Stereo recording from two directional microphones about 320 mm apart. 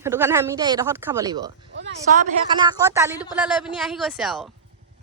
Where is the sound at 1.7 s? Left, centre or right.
Right; by 4.5 s centre.